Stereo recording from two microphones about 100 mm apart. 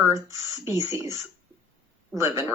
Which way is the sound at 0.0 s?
25° right (ahead or behind).